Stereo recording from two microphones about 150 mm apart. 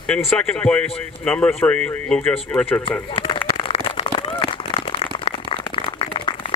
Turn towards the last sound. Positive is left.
turn(degrees=35)  # may be behind; listen again after turning